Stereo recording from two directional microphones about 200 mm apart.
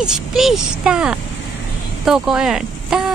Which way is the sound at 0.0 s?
Centre (ahead or behind).